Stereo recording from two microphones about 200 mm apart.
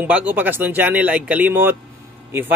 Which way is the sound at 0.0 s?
10° right (ahead or behind).